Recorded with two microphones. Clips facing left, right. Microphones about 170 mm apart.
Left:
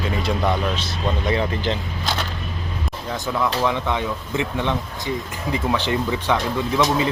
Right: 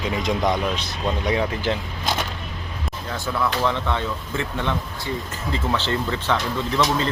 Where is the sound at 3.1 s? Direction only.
15° left (ahead or behind).